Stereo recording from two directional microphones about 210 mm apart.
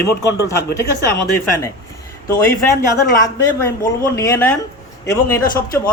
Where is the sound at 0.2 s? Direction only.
15° left (ahead or behind).